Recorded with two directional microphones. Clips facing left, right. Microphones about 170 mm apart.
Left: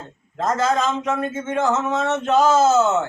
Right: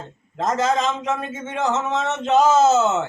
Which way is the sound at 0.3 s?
20° right (ahead or behind).